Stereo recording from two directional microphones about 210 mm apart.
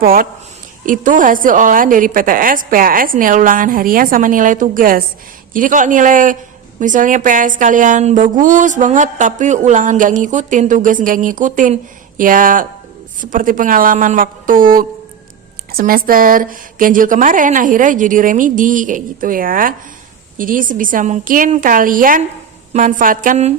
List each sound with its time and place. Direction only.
0.0 s speech: 45° right (ahead or behind)